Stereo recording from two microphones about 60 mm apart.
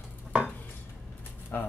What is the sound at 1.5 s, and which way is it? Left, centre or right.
Speech, left.